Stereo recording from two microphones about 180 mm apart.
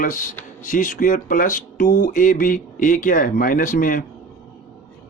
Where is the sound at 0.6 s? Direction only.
45° left (ahead or behind).